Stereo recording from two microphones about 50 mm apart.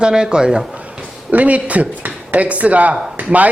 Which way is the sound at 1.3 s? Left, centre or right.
Right.